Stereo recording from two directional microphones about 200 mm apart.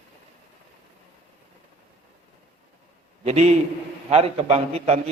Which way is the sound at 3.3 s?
35° right (ahead or behind).